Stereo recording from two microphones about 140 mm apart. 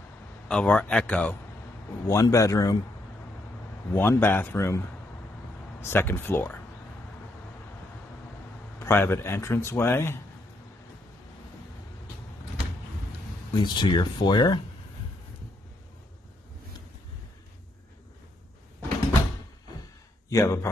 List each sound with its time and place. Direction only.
0.5 s speech: 5° left (ahead or behind)
2.0 s a man's voice: 25° left (ahead or behind)
3.9 s speech: 15° left (ahead or behind)
8.7 s speech: 15° left (ahead or behind)
13.5 s speech: 35° left (ahead or behind)
20.2 s a man's voice: 20° left (ahead or behind)